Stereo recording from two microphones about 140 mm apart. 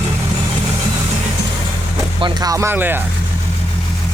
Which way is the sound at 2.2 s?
25° right (ahead or behind).